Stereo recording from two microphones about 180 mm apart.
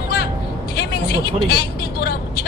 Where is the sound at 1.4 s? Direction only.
60° left (ahead or behind).